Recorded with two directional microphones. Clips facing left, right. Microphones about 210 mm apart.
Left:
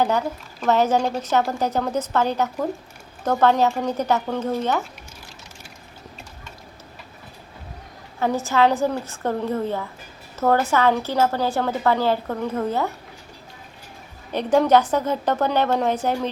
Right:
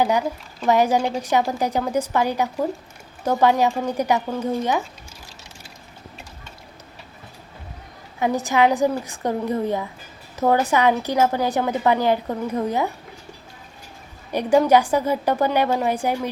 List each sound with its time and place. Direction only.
0.0 s speech: 10° right (ahead or behind)
8.2 s speech: 15° right (ahead or behind)
14.3 s speech: 10° right (ahead or behind)